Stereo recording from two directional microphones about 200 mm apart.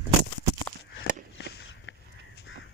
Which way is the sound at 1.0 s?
60° left (ahead or behind).